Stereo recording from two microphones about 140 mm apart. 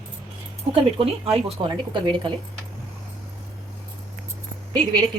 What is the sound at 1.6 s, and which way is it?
Speech, 30° right (ahead or behind).